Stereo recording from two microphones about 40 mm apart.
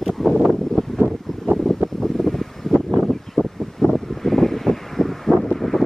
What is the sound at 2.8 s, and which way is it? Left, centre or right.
Vehicle, centre.